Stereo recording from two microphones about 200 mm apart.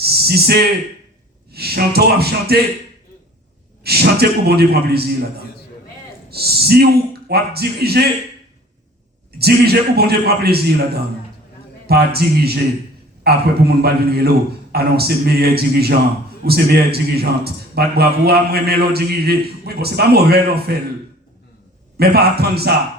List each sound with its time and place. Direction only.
0.0 s a sound: 55° right (ahead or behind)
1.5 s a man's voice: 50° right (ahead or behind)
3.8 s a man's voice: 50° right (ahead or behind)
6.3 s a man's voice: 50° right (ahead or behind)
9.4 s a man's voice: 50° right (ahead or behind)
21.9 s a man's voice: 50° right (ahead or behind)